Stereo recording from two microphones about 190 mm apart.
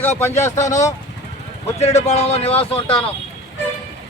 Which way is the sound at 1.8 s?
35° left (ahead or behind).